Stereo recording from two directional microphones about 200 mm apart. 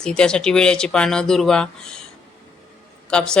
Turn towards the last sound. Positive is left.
turn(degrees=5)  # may be behind; listen again after turning